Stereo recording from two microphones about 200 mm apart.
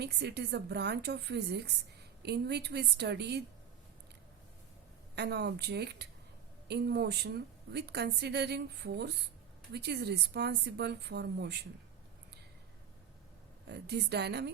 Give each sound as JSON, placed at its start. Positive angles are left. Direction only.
{"t": 0.0, "sound": "a woman's voice", "side_deg": -55}
{"t": 5.1, "sound": "a woman's voice", "side_deg": -55}
{"t": 13.7, "sound": "a woman's voice", "side_deg": -55}